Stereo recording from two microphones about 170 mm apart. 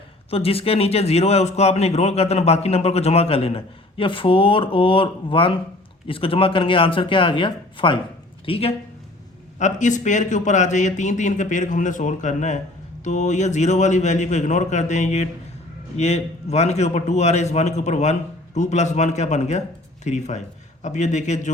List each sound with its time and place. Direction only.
0.3 s a man's voice: 35° left (ahead or behind)
9.6 s a man's voice: 45° left (ahead or behind)